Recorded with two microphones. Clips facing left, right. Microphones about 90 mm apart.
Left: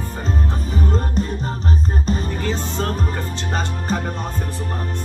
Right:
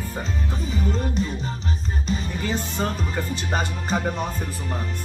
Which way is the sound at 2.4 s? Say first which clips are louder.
Left 2 dB; 10° right (ahead or behind).